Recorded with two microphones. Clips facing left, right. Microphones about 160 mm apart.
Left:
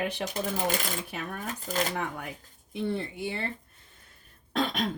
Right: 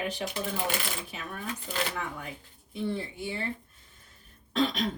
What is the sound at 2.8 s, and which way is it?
Speech, 55° left (ahead or behind).